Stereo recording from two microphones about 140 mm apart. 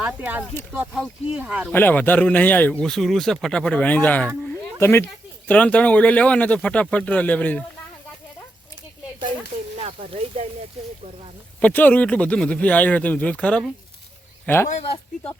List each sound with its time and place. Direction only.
0.0 s speech: 10° right (ahead or behind)
1.7 s speech: 15° left (ahead or behind)
4.4 s a sound: 15° left (ahead or behind)
5.5 s speech: 10° left (ahead or behind)
9.7 s speech: 45° right (ahead or behind)
11.6 s speech: 15° left (ahead or behind)
14.7 s speech: 45° left (ahead or behind)